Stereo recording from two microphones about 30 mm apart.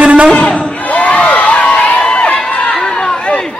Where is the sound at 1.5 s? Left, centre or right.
Left.